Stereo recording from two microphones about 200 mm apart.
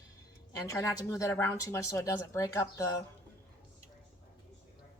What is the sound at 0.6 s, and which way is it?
Speech, 15° left (ahead or behind).